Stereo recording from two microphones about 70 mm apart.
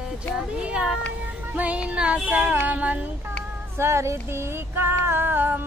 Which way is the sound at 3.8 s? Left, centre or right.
Right.